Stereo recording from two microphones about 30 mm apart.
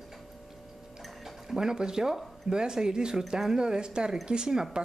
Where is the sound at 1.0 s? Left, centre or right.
Centre.